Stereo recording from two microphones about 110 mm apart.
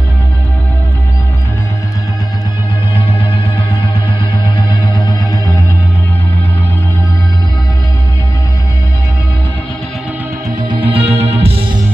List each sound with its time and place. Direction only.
4.6 s music: 45° left (ahead or behind)
10.7 s music: 55° right (ahead or behind)